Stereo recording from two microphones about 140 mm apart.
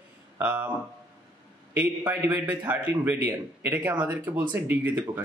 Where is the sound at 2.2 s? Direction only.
20° right (ahead or behind).